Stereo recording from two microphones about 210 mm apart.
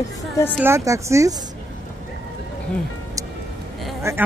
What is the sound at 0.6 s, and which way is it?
Speech, 15° right (ahead or behind).